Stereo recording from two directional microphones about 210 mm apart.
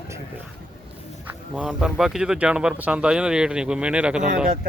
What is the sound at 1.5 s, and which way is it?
Speech, 5° right (ahead or behind).